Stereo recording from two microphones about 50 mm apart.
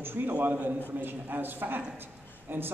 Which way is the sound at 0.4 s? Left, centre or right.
Right.